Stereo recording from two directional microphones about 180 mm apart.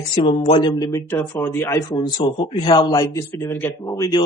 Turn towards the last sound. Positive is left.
turn(degrees=20)  # may be behind; listen again after turning